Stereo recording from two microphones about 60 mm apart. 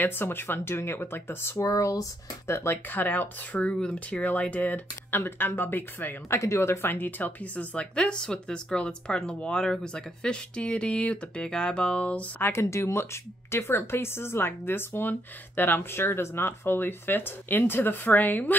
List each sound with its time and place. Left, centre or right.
0.0 s speech: left
1.7 s speech: left
2.5 s speech: left
3.7 s a woman's voice: centre
4.2 s speech: left
6.3 s a woman's voice: left
12.4 s speech: left